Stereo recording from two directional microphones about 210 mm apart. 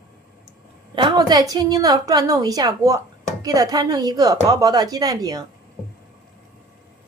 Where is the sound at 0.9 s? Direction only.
20° right (ahead or behind).